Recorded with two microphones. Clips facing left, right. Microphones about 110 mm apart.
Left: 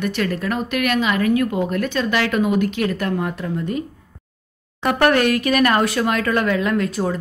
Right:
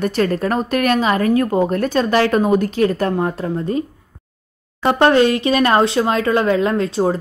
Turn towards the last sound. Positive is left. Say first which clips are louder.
# right 3 dB
turn(degrees=-30)  # may be behind; listen again after turning